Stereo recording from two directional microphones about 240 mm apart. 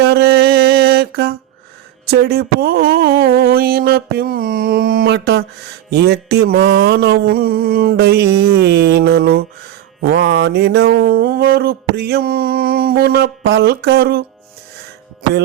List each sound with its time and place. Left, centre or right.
0.0 s a sound: right
2.0 s mantra: right
5.9 s music: right
10.0 s mantra: right